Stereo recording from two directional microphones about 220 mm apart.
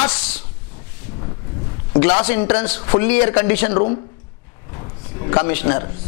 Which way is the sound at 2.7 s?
15° left (ahead or behind).